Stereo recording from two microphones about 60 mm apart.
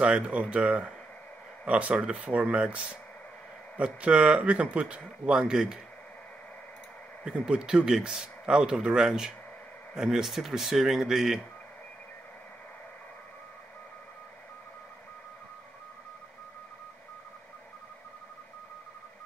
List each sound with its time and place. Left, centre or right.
0.0 s speech: centre
7.2 s a man's voice: centre